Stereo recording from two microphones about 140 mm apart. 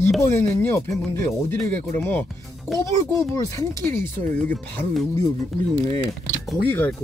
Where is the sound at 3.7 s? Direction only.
20° left (ahead or behind).